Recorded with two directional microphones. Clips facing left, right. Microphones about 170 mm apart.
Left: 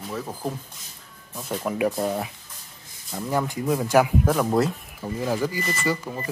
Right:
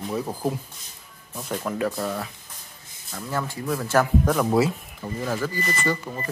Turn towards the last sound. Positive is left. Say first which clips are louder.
# even
turn(degrees=10)  # may be behind; listen again after turning